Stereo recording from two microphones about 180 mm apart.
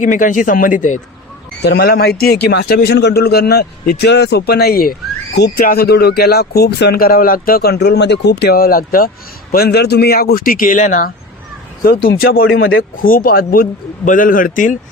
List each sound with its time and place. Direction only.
0.0 s speech: 45° left (ahead or behind)
1.6 s speech: 65° left (ahead or behind); by 11.1 s 45° left (ahead or behind)
11.8 s speech: 65° left (ahead or behind); by 14.8 s 45° left (ahead or behind)